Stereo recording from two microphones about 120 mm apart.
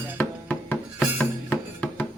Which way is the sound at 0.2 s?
15° left (ahead or behind).